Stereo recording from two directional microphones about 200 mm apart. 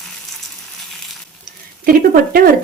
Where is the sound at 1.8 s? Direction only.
45° right (ahead or behind).